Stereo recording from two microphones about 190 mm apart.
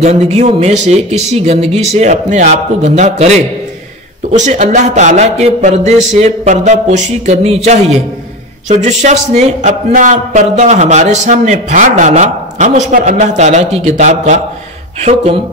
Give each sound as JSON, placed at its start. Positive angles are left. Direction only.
{"t": 0.0, "sound": "a man's voice", "side_deg": -35}